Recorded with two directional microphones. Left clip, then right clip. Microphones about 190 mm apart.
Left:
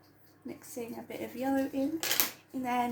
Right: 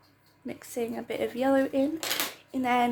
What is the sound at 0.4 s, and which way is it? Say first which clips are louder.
A woman's voice: right 8 dB; 60° right (ahead or behind).